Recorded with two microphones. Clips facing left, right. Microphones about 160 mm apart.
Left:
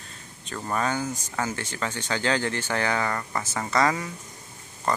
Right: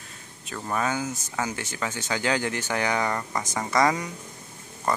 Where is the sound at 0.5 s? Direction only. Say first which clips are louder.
Even; 5° right (ahead or behind).